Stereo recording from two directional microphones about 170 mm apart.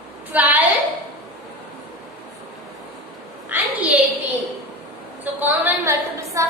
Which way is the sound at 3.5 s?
10° right (ahead or behind).